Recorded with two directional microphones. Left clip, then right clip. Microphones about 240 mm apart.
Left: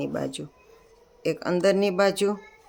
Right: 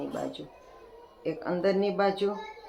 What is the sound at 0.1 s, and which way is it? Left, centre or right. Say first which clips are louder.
A woman's voice: left 4 dB; left.